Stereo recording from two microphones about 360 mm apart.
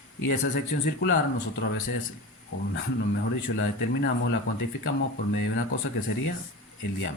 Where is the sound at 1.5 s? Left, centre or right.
Left.